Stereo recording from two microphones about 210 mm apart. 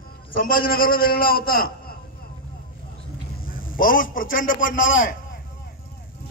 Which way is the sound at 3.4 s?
40° left (ahead or behind).